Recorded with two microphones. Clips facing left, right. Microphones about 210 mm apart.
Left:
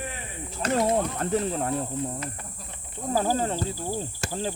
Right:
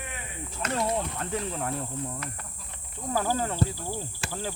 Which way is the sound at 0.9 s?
45° left (ahead or behind).